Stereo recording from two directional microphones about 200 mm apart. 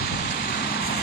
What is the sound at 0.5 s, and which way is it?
Rain, 50° left (ahead or behind).